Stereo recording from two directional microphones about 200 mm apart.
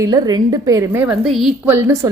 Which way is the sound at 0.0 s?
20° right (ahead or behind).